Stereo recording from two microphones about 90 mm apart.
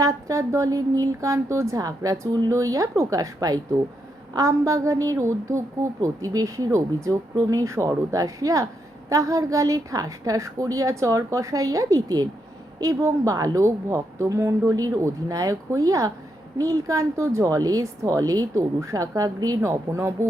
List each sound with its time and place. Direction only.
0.0 s a woman's voice: 35° right (ahead or behind)